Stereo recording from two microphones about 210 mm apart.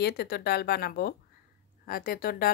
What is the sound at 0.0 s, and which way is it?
Speech, 50° left (ahead or behind).